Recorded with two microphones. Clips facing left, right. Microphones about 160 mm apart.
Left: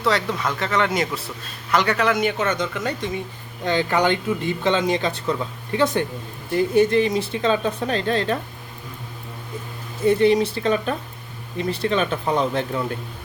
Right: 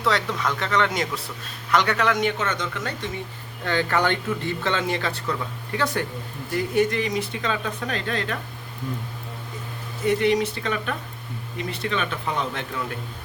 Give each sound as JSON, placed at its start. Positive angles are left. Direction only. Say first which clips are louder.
{"t": 0.0, "sound": "speech", "louder": "left 2 dB", "side_deg": 0}
{"t": 10.1, "sound": "speech", "louder": "left 4 dB", "side_deg": 30}